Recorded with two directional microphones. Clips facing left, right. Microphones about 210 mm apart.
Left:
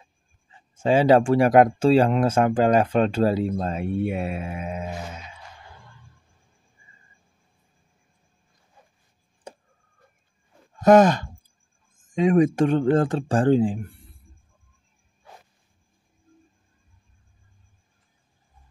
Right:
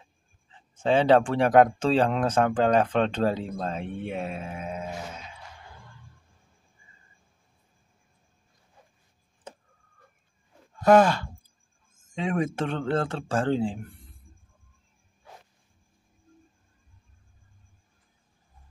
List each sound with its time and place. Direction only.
0.5 s speech: 10° left (ahead or behind)
10.8 s speech: 20° left (ahead or behind)